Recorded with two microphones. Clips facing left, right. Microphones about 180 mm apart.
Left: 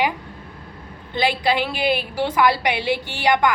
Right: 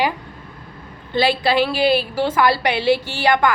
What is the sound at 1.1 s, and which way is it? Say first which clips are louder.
A woman's voice: right 3 dB; 15° left (ahead or behind).